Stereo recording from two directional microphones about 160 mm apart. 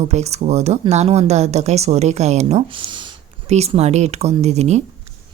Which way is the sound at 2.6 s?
30° right (ahead or behind).